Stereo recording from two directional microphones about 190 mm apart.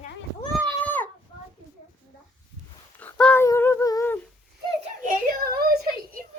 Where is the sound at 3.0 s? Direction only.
5° left (ahead or behind).